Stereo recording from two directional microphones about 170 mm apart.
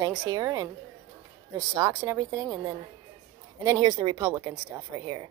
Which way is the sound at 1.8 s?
15° right (ahead or behind).